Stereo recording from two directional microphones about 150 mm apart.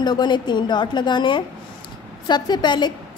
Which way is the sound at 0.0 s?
30° left (ahead or behind).